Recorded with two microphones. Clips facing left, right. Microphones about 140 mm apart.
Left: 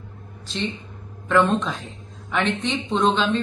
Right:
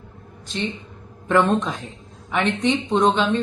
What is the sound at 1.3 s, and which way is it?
Speech, 15° right (ahead or behind).